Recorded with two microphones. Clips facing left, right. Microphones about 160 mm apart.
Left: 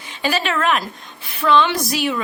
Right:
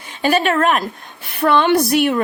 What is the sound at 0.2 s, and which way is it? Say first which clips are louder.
Speech: right 5 dB; 50° right (ahead or behind).